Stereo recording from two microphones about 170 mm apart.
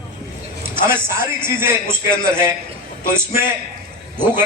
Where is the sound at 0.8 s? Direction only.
15° right (ahead or behind).